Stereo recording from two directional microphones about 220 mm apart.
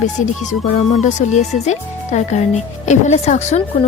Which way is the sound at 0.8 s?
30° left (ahead or behind).